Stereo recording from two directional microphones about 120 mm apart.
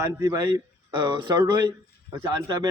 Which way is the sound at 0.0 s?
30° right (ahead or behind).